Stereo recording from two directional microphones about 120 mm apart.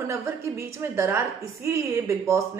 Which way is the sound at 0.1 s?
20° right (ahead or behind).